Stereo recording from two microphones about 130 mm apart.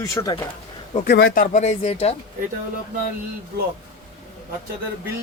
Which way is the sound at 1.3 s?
85° left.